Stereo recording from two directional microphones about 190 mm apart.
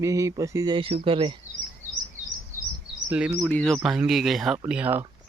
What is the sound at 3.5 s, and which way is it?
Speech, 5° left (ahead or behind).